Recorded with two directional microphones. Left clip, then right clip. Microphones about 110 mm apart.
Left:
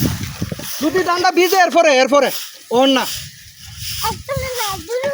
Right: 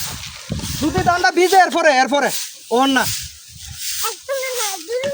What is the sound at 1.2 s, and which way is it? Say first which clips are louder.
Speech: right 1 dB; 50° right (ahead or behind).